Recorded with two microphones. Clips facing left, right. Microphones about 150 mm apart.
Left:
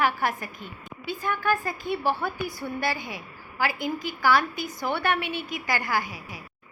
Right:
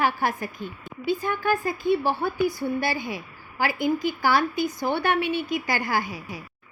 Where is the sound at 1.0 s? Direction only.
20° right (ahead or behind).